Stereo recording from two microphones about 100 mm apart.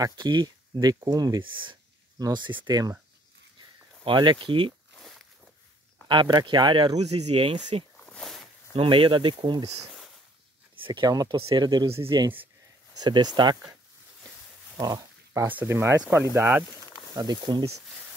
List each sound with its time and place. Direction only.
0.0 s speech: 45° right (ahead or behind)
1.4 s speech: 55° right (ahead or behind)
2.1 s speech: 45° right (ahead or behind)
4.0 s speech: 55° right (ahead or behind)
6.0 s speech: 45° right (ahead or behind)
7.0 s speech: 80° right
8.0 s a sound: 10° left (ahead or behind)
8.7 s speech: 55° right (ahead or behind)
10.8 s speech: 45° right (ahead or behind)
13.0 s speech: 45° right (ahead or behind)
14.8 s a sound: 40° right (ahead or behind)
15.4 s speech: 20° right (ahead or behind)
17.1 s speech: 45° right (ahead or behind)